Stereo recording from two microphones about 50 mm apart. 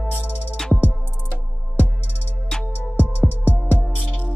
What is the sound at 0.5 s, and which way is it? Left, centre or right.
Music, centre.